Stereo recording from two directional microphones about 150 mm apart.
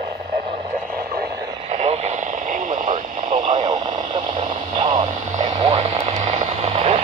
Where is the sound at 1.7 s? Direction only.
45° right (ahead or behind).